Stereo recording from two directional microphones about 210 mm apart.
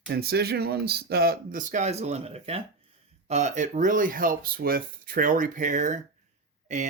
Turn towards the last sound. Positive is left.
turn(degrees=-35)  # may be behind; listen again after turning